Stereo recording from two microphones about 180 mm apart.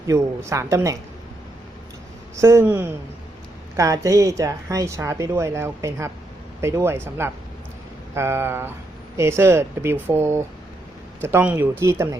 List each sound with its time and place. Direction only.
0.1 s speech: 15° right (ahead or behind)
2.3 s speech: 15° right (ahead or behind)